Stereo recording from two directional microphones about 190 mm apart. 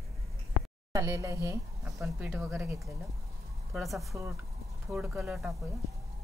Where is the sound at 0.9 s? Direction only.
20° right (ahead or behind).